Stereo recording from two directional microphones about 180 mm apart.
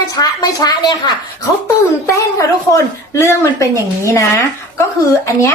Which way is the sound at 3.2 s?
15° left (ahead or behind).